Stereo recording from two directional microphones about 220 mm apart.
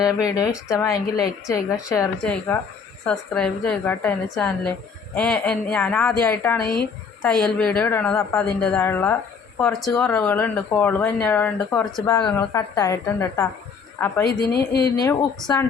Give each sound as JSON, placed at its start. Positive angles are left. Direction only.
{"t": 0.3, "sound": "a woman's voice", "side_deg": 15}
{"t": 12.0, "sound": "speech", "side_deg": 15}
{"t": 14.3, "sound": "speech", "side_deg": 45}
{"t": 14.9, "sound": "speech", "side_deg": 15}